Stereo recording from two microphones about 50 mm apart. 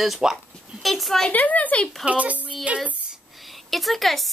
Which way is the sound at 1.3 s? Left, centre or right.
Left.